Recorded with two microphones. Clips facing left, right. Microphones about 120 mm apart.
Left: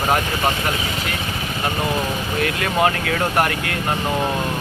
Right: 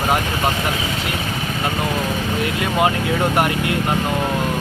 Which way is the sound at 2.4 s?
20° right (ahead or behind).